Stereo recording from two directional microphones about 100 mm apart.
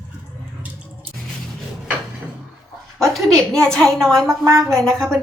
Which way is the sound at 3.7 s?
5° left (ahead or behind).